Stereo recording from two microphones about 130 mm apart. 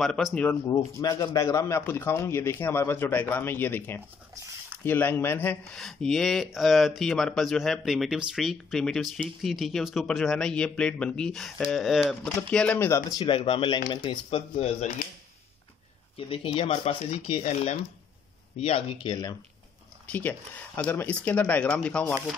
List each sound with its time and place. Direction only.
0.0 s speech: 5° left (ahead or behind)
0.7 s a man's voice: 25° left (ahead or behind)
5.6 s speech: 5° left (ahead or behind)
12.4 s speech: 10° left (ahead or behind)
13.4 s speech: 45° left (ahead or behind)
16.2 s speech: 45° left (ahead or behind)
20.1 s speech: 10° left (ahead or behind)